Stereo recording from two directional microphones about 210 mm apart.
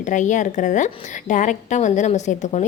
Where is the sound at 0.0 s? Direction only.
35° left (ahead or behind).